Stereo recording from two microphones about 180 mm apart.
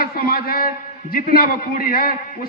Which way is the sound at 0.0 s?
55° left (ahead or behind).